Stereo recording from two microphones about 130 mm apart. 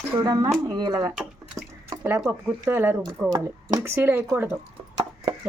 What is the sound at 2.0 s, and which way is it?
Speech, 20° right (ahead or behind).